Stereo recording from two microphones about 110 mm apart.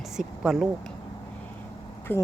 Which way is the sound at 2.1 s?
20° left (ahead or behind).